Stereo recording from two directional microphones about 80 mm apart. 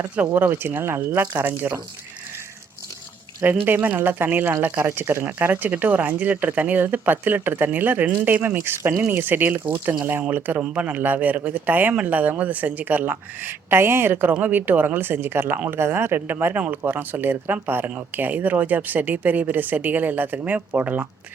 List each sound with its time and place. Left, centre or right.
0.2 s speech: right
3.4 s speech: right